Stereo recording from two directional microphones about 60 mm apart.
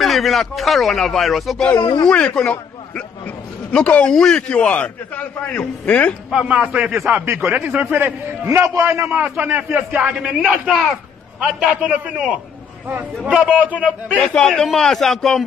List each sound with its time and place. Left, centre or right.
0.0 s a man's voice: centre
2.0 s a man's voice: centre
4.1 s a man's voice: centre
4.4 s a man's voice: centre
6.4 s a man's voice: right
8.5 s a man's voice: right
9.3 s a man's voice: right; by 13.6 s centre
13.6 s a man's voice: right
13.8 s a man's voice: centre